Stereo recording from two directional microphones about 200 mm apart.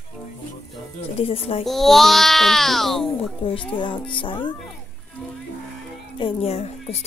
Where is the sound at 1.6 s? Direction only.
Centre (ahead or behind).